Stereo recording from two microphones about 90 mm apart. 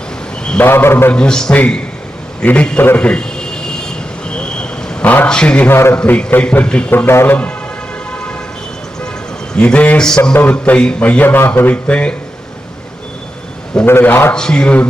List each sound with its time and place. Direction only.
0.6 s a man's voice: 25° left (ahead or behind)
1.1 s a man's voice: 10° left (ahead or behind)
2.4 s a sound: 15° left (ahead or behind)
5.3 s a man's voice: 10° left (ahead or behind)
5.6 s a man's voice: 25° left (ahead or behind)
6.0 s a man's voice: 10° left (ahead or behind)
6.9 s a man's voice: 25° left (ahead or behind)
9.6 s a man's voice: 15° left (ahead or behind)
10.3 s a man's voice: 20° left (ahead or behind)
13.8 s a man's voice: 25° left (ahead or behind)
14.3 s a man's voice: 10° left (ahead or behind)